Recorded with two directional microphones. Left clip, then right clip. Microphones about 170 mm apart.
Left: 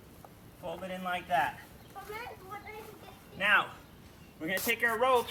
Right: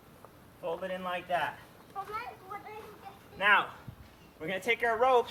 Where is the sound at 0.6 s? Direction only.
5° left (ahead or behind).